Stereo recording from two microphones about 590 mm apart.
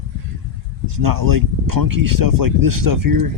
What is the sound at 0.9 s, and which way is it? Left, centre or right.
Speech, right.